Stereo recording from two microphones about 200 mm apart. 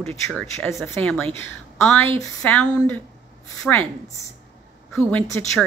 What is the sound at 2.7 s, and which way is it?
Speech, 15° left (ahead or behind).